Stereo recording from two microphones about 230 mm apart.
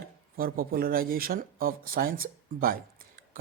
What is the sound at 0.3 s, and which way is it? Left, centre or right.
Speech, right.